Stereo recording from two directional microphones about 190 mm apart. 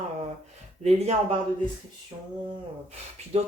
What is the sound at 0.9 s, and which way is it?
Speech, 35° right (ahead or behind).